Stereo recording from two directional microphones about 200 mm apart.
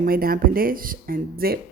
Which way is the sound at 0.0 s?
45° right (ahead or behind).